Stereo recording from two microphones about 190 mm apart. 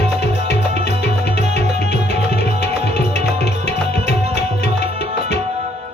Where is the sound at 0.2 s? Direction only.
60° left (ahead or behind).